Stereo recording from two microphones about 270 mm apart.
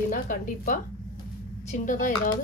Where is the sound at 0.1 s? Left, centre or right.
Left.